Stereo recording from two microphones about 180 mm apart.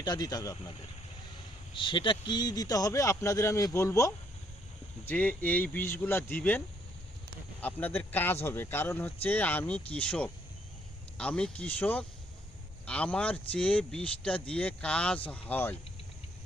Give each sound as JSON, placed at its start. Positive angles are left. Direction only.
{"t": 0.0, "sound": "speech", "side_deg": 20}
{"t": 1.7, "sound": "a man's voice", "side_deg": 25}
{"t": 7.6, "sound": "a man's voice", "side_deg": 10}